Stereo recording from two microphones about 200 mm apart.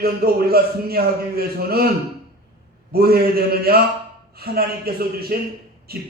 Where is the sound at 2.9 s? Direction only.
50° right (ahead or behind).